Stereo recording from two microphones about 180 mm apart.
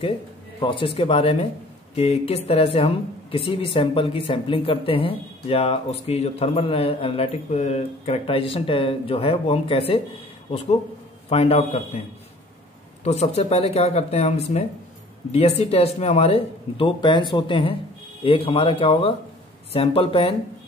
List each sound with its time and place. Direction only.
0.6 s a woman's voice: 30° left (ahead or behind)
11.2 s a woman's voice: 35° left (ahead or behind)
13.0 s a woman's voice: 35° left (ahead or behind)